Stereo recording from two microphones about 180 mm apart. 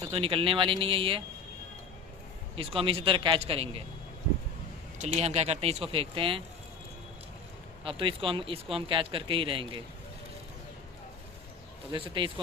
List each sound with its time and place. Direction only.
0.1 s speech: 30° right (ahead or behind)
2.6 s speech: 30° right (ahead or behind)
4.9 s speech: 40° right (ahead or behind)
7.9 s speech: 30° right (ahead or behind)
11.9 s speech: 25° right (ahead or behind)